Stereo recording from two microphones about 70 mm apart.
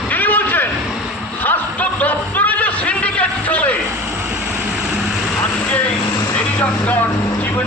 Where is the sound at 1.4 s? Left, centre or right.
Left.